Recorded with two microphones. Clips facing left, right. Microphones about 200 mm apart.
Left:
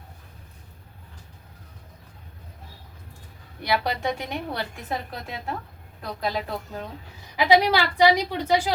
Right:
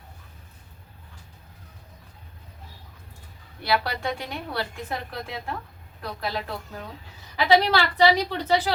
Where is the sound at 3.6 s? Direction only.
20° left (ahead or behind).